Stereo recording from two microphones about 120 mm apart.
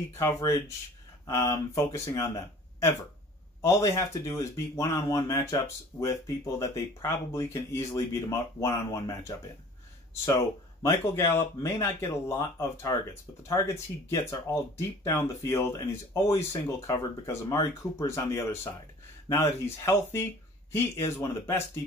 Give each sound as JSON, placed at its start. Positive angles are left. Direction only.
{"t": 0.2, "sound": "speech", "side_deg": 25}